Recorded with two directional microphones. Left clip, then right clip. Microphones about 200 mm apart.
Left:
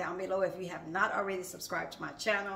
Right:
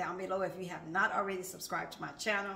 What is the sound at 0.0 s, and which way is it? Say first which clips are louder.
A woman's voice: left 3 dB; centre (ahead or behind).